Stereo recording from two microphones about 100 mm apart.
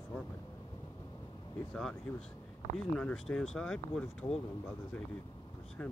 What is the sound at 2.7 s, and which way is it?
Speech, 5° left (ahead or behind).